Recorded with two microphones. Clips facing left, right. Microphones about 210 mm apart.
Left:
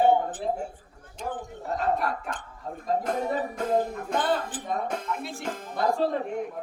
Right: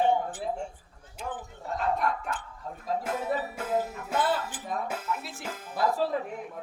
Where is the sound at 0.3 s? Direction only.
10° right (ahead or behind).